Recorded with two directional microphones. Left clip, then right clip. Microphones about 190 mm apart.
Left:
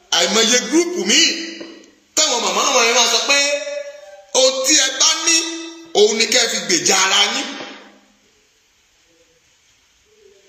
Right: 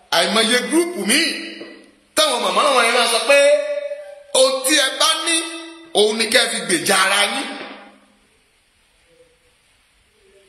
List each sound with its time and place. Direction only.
0.1 s music: 15° right (ahead or behind)
2.1 s speech: 20° right (ahead or behind)
4.3 s music: 15° right (ahead or behind)